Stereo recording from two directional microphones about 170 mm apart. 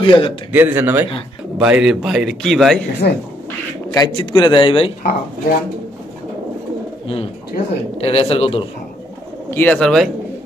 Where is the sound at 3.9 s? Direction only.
25° left (ahead or behind).